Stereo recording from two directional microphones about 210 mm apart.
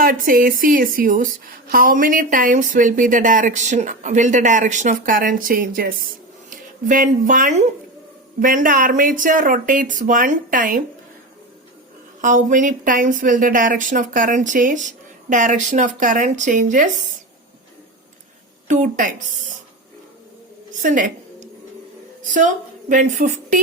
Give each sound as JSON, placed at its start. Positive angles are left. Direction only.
{"t": 0.0, "sound": "a woman's voice", "side_deg": -40}
{"t": 12.2, "sound": "a woman's voice", "side_deg": -35}
{"t": 18.7, "sound": "a woman's voice", "side_deg": -40}
{"t": 20.8, "sound": "a sound", "side_deg": -40}
{"t": 22.2, "sound": "a woman's voice", "side_deg": -40}